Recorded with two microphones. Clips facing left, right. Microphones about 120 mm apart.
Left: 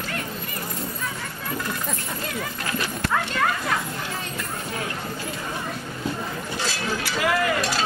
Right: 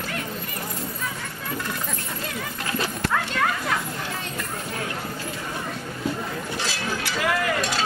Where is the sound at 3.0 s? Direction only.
Centre (ahead or behind).